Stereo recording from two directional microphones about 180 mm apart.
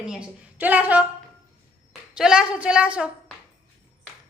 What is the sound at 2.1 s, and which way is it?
Speech, 5° right (ahead or behind).